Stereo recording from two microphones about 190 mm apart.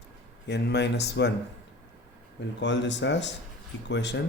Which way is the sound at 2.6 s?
70° left (ahead or behind).